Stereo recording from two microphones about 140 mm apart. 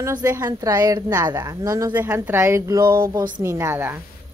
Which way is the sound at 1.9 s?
10° right (ahead or behind).